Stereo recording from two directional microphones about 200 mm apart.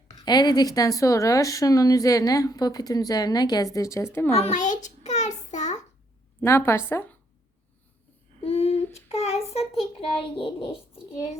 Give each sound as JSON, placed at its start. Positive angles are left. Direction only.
{"t": 0.1, "sound": "a woman's voice", "side_deg": 20}
{"t": 4.3, "sound": "a child's voice", "side_deg": 35}
{"t": 5.5, "sound": "child singing", "side_deg": 35}
{"t": 6.4, "sound": "a woman's voice", "side_deg": 15}
{"t": 8.4, "sound": "child singing", "side_deg": 30}
{"t": 9.5, "sound": "a child's voice", "side_deg": 30}